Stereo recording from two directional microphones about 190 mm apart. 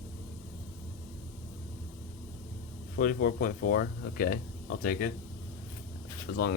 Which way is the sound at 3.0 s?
50° left (ahead or behind).